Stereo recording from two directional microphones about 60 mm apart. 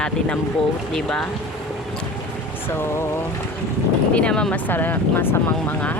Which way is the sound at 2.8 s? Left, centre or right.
Left.